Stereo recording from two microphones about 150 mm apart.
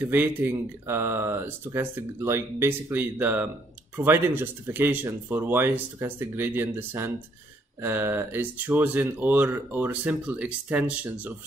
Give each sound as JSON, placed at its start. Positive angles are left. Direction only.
{"t": 0.0, "sound": "speech", "side_deg": -15}